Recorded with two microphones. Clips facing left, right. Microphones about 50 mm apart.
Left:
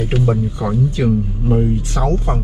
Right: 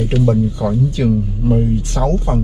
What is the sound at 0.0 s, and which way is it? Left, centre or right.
Speech, centre.